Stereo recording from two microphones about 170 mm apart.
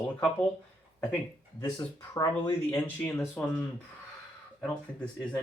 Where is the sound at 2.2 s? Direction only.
20° left (ahead or behind).